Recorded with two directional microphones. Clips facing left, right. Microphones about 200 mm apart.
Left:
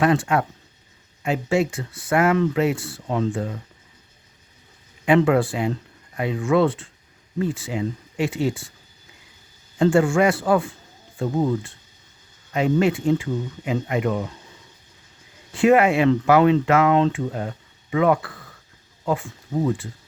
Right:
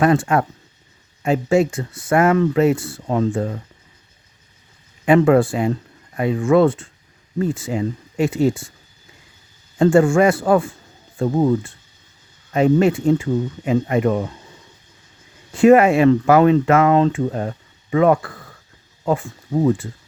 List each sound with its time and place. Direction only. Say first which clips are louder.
0.0 s speech: right 3 dB; 45° right (ahead or behind)
5.0 s speech: right 4 dB; 45° right (ahead or behind)
9.7 s speech: right 4 dB; 45° right (ahead or behind)
12.5 s speech: right 5 dB; 45° right (ahead or behind)
15.5 s speech: right 5 dB; 45° right (ahead or behind)